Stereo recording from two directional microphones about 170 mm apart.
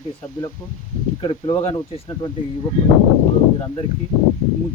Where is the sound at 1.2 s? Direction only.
30° left (ahead or behind).